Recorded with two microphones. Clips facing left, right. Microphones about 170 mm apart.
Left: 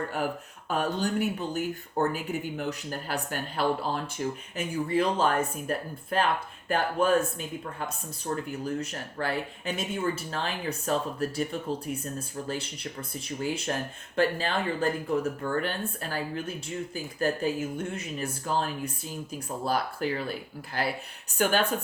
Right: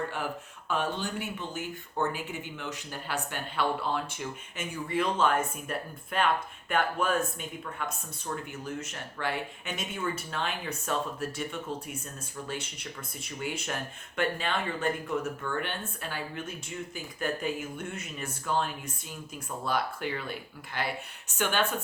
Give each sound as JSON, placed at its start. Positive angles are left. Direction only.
{"t": 0.7, "sound": "speech", "side_deg": 40}